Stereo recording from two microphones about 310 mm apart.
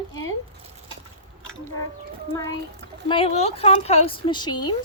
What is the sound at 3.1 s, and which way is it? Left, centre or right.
Speech, centre.